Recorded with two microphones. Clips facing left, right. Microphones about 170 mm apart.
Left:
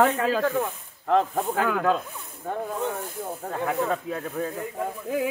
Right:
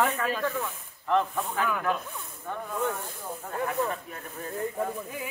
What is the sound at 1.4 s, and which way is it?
Speech, 80° left.